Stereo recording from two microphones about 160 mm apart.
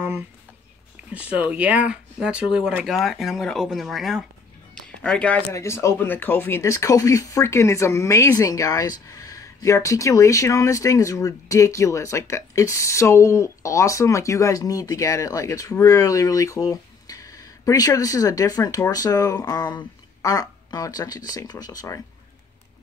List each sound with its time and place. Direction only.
1.1 s speech: 10° right (ahead or behind); by 22.0 s 20° left (ahead or behind)